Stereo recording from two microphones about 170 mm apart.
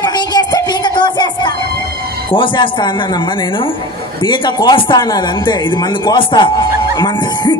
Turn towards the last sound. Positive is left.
turn(degrees=25)  # may be behind; listen again after turning